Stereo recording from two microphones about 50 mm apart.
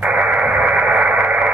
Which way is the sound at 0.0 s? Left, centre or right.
Right.